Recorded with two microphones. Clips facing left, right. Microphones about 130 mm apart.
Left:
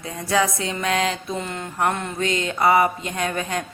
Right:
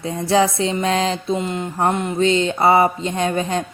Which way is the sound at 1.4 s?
20° right (ahead or behind).